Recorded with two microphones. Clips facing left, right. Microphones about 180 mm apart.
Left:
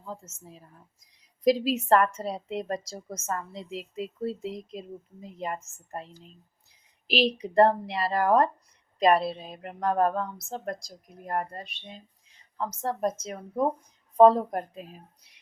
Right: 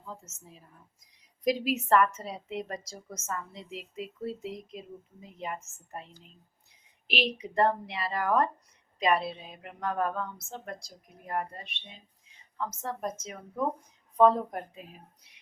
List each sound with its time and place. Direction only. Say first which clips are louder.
0.1 s a woman's voice: left 5 dB; 35° left (ahead or behind)
7.1 s a woman's voice: left 6 dB; 35° left (ahead or behind)